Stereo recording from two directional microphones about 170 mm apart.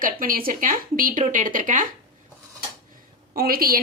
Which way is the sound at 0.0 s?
55° right (ahead or behind).